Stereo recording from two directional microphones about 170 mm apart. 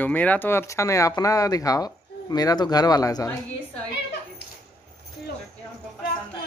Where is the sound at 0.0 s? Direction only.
10° left (ahead or behind).